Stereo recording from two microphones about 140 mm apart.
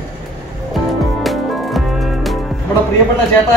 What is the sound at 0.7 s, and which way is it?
Music, centre (ahead or behind).